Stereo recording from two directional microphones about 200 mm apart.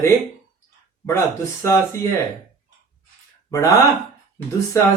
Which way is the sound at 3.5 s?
15° left (ahead or behind).